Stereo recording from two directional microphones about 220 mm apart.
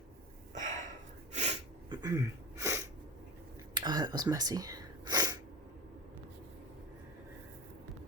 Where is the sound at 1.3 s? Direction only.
30° right (ahead or behind).